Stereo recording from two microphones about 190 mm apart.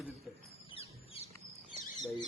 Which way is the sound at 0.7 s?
30° left (ahead or behind).